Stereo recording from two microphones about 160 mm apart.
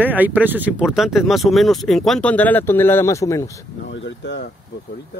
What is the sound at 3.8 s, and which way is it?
Speech, 90° left.